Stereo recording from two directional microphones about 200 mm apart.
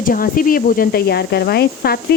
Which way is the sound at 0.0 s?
45° left (ahead or behind).